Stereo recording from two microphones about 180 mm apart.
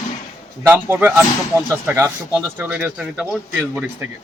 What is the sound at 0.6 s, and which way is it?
Speech, 10° right (ahead or behind).